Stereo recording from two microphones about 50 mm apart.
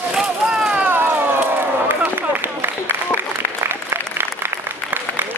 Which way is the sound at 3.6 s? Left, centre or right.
Right.